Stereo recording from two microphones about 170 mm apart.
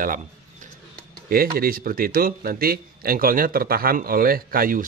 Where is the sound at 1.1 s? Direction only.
60° right (ahead or behind).